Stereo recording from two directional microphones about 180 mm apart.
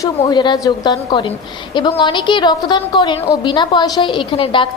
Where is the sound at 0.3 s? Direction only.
25° left (ahead or behind).